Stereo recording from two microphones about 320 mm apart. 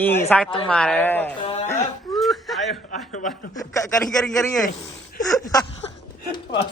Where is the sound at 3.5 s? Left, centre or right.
Centre.